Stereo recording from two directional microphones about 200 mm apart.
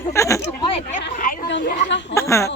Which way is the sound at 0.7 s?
30° left (ahead or behind).